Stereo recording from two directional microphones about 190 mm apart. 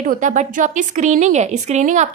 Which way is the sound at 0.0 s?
40° right (ahead or behind).